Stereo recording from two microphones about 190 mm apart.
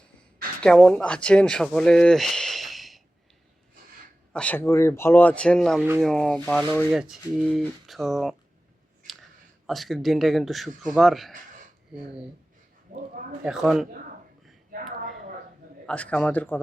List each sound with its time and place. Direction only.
0.6 s speech: 5° left (ahead or behind)
4.3 s speech: 5° left (ahead or behind)
9.6 s speech: centre (ahead or behind)
12.9 s speech: 45° right (ahead or behind)
13.4 s speech: centre (ahead or behind)
14.7 s a sound: 45° right (ahead or behind)
15.9 s speech: 5° left (ahead or behind)